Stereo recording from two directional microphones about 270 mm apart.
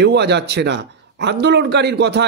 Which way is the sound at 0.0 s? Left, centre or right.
Right.